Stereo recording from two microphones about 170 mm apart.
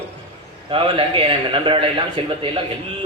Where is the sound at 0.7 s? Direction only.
30° right (ahead or behind).